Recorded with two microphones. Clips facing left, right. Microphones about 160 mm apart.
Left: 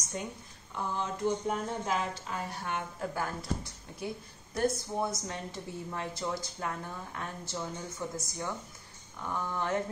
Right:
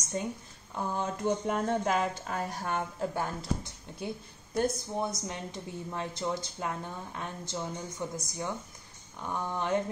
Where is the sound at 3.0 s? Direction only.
25° right (ahead or behind).